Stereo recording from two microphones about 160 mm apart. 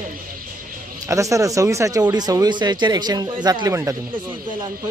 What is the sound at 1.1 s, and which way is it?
Speech, 20° right (ahead or behind).